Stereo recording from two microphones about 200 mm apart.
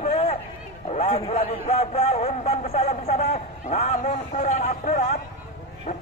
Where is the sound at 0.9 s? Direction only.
30° left (ahead or behind).